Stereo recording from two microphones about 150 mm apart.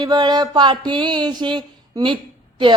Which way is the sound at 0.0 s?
30° right (ahead or behind).